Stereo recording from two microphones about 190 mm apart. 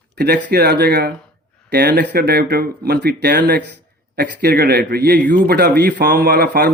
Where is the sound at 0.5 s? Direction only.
55° right (ahead or behind).